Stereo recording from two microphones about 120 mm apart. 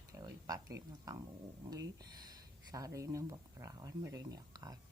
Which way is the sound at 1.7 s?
30° right (ahead or behind).